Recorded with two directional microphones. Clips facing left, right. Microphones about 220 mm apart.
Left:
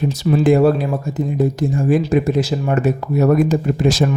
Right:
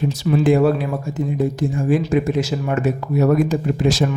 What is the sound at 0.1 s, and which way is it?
Speech, 40° left (ahead or behind).